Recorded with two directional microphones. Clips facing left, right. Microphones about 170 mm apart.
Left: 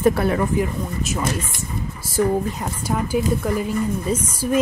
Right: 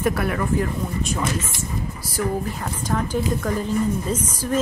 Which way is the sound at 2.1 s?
15° left (ahead or behind).